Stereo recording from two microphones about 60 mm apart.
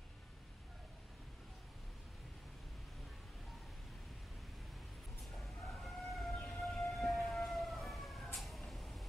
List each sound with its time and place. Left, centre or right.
5.3 s vehicle: centre
6.6 s siren: centre